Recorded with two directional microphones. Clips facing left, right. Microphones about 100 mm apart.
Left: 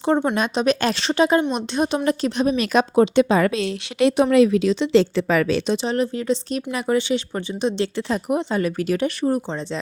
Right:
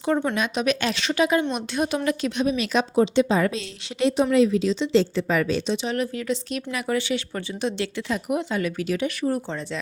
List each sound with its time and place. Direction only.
0.0 s a woman's voice: 30° left (ahead or behind)
2.0 s a woman's voice: 35° left (ahead or behind); by 5.7 s 70° left (ahead or behind)
5.7 s speech: 30° left (ahead or behind)
9.3 s a woman's voice: 20° left (ahead or behind)